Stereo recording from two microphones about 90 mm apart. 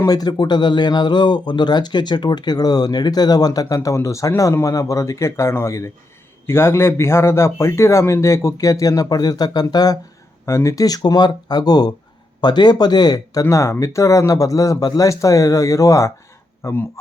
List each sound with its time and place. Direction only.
0.0 s a man's voice: 45° left (ahead or behind)
10.4 s a man's voice: 35° left (ahead or behind)